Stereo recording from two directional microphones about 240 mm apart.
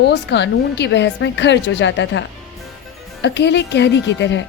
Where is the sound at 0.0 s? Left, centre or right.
Left.